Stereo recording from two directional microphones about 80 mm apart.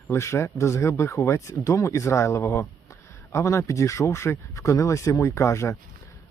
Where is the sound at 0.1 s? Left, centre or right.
Left.